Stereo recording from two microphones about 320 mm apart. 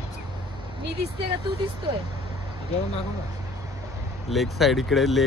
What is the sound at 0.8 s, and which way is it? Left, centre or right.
Speech, right.